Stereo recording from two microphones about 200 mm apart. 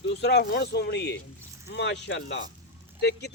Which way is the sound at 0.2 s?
55° left (ahead or behind).